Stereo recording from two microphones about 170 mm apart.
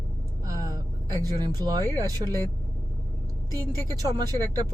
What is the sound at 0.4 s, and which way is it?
Vehicle, 20° right (ahead or behind).